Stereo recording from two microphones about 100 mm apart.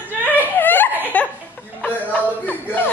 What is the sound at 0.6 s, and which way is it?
Laughter, 20° left (ahead or behind).